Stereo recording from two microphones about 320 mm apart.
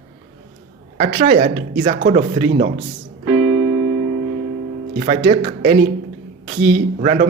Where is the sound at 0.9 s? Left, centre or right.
Right.